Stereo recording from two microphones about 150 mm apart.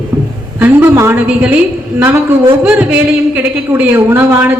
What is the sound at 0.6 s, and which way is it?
A man's voice, 15° right (ahead or behind).